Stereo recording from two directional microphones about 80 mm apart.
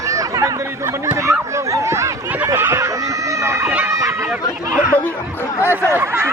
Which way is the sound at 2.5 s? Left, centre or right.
Right.